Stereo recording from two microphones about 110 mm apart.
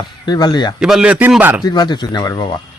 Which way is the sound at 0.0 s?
40° left (ahead or behind).